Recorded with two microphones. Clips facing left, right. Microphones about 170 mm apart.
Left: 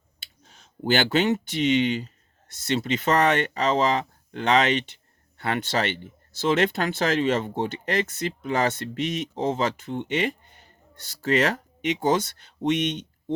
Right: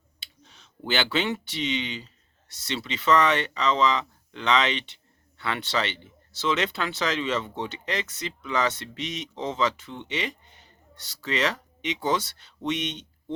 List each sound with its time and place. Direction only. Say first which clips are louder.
0.2 s speech: even; 45° left (ahead or behind)